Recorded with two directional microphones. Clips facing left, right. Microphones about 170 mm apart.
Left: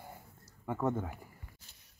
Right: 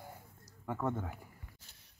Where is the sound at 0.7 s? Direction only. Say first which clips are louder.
Left 3 dB; 5° left (ahead or behind).